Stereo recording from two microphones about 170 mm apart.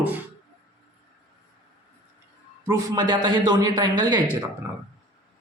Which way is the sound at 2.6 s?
20° right (ahead or behind).